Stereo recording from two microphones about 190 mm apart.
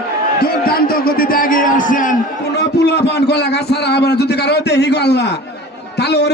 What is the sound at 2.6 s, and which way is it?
A man's voice, 60° left (ahead or behind).